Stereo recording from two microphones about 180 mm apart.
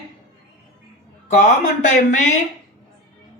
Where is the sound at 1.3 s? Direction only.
40° left (ahead or behind).